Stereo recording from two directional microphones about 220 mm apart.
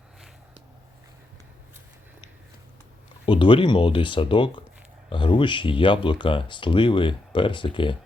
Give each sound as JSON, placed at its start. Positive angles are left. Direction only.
{"t": 3.2, "sound": "speech", "side_deg": 20}